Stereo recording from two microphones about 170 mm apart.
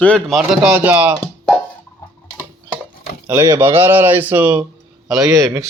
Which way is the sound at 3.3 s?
10° right (ahead or behind).